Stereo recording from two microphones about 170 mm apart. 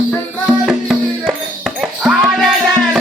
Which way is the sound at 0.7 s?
5° right (ahead or behind).